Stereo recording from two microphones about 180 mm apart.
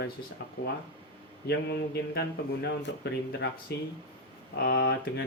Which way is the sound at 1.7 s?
65° left (ahead or behind).